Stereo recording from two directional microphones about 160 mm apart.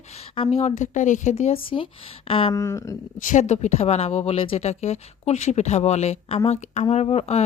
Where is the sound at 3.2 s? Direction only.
50° left (ahead or behind).